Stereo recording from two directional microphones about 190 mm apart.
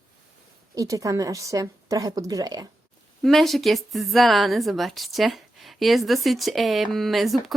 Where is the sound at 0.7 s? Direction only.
15° right (ahead or behind).